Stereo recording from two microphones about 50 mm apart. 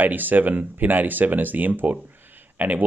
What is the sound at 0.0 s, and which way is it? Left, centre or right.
Speech, right.